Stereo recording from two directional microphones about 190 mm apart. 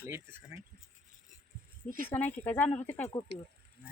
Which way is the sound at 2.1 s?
10° left (ahead or behind).